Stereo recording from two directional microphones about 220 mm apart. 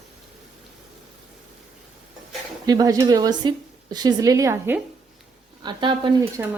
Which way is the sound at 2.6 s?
15° right (ahead or behind).